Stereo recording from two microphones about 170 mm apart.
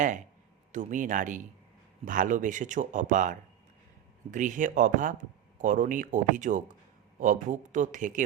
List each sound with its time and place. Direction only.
0.7 s speech: 45° right (ahead or behind)